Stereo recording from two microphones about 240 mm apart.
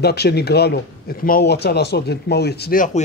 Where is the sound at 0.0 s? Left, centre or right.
Left.